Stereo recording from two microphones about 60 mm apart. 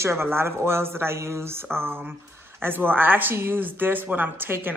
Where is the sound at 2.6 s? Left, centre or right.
Right.